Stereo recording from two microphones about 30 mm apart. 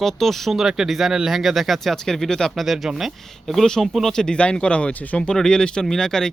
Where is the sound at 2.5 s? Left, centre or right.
Centre.